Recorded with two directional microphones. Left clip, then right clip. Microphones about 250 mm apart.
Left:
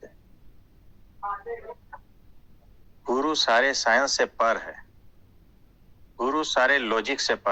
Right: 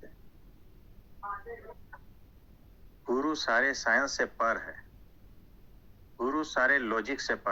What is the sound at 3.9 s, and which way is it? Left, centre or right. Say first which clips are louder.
Speech: left 5 dB; left.